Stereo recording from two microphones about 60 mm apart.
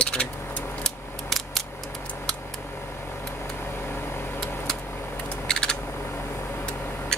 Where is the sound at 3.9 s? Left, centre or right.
Left.